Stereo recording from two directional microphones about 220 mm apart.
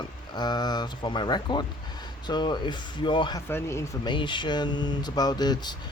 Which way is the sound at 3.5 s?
10° left (ahead or behind).